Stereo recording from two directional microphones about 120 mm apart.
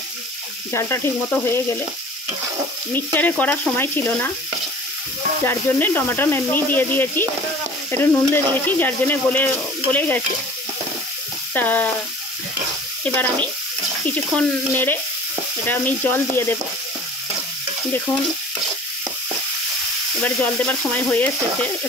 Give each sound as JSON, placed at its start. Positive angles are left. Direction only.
{"t": 0.7, "sound": "frying", "side_deg": 20}
{"t": 2.9, "sound": "speech", "side_deg": 15}
{"t": 5.4, "sound": "speech", "side_deg": 20}
{"t": 11.5, "sound": "speech", "side_deg": 15}
{"t": 13.0, "sound": "speech", "side_deg": 10}
{"t": 20.2, "sound": "speech", "side_deg": 10}